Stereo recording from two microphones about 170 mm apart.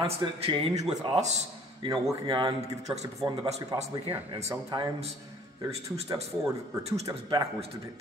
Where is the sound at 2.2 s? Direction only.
25° right (ahead or behind).